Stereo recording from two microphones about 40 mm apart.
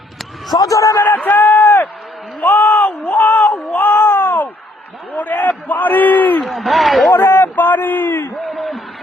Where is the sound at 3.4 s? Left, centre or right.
Left.